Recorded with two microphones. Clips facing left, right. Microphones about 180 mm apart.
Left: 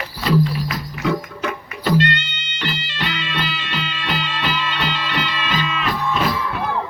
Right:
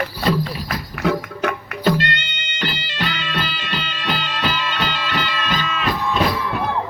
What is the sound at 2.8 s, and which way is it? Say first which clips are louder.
Music: right 1 dB; 45° right (ahead or behind).